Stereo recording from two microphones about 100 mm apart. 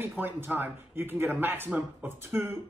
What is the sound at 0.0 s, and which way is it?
Speech, 20° right (ahead or behind).